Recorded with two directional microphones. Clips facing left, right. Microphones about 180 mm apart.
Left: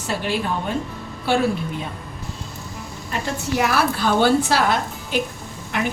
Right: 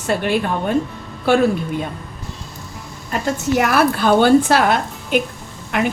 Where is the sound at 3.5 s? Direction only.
55° right (ahead or behind).